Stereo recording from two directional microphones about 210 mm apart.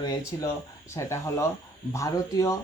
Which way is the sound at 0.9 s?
15° left (ahead or behind).